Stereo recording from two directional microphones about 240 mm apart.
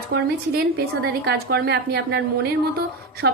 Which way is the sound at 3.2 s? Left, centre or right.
Right.